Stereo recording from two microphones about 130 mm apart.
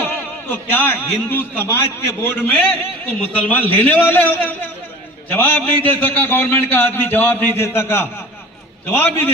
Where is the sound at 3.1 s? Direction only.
15° left (ahead or behind).